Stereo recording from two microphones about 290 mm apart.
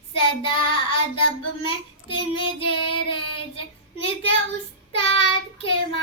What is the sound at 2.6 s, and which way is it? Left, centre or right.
Child singing, left.